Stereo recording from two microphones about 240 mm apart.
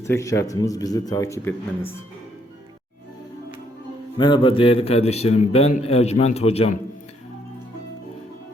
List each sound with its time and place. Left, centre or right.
0.0 s speech: centre
4.2 s a man's voice: left